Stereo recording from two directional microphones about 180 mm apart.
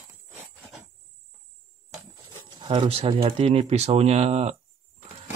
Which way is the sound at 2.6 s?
25° right (ahead or behind).